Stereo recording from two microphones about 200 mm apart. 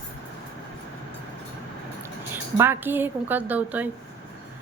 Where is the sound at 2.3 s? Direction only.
10° right (ahead or behind).